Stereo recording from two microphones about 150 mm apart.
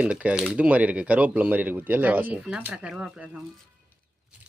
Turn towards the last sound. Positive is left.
turn(degrees=-5)  # may be behind; listen again after turning